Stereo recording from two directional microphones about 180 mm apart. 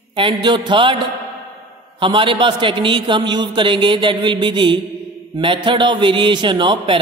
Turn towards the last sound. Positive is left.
turn(degrees=-25)  # may be behind; listen again after turning